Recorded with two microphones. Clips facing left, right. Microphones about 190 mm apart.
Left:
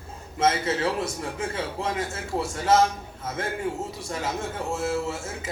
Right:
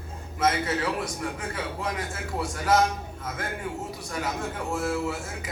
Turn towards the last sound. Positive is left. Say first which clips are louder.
# left 1 dB
turn(degrees=25)  # may be behind; listen again after turning